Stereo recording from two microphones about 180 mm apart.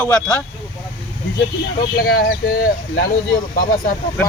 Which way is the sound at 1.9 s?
55° left (ahead or behind).